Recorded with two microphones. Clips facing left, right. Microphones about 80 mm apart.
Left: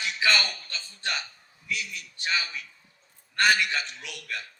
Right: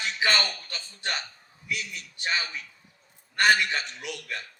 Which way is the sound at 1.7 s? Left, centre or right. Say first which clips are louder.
Even; right.